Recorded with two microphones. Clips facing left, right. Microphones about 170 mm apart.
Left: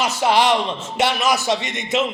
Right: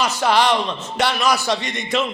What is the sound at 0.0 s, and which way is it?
A man's voice, 20° left (ahead or behind).